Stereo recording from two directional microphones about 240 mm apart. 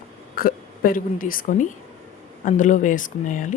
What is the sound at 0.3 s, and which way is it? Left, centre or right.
A woman's voice, left.